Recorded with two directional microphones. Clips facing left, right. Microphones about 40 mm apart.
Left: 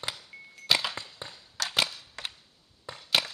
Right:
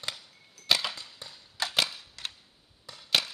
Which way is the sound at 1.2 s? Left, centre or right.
Left.